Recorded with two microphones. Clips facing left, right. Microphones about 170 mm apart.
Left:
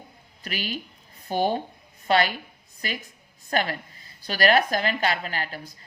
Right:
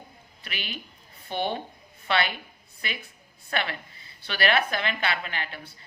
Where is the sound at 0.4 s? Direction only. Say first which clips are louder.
Left 6 dB; 40° left (ahead or behind).